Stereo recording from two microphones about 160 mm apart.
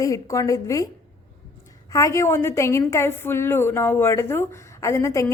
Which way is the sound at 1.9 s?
20° left (ahead or behind).